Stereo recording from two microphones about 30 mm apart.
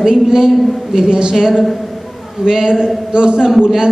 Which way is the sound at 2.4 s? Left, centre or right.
Right.